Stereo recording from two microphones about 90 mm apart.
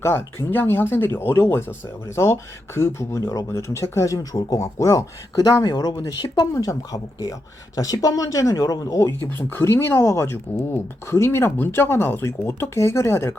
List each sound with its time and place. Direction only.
0.0 s speech: 25° left (ahead or behind)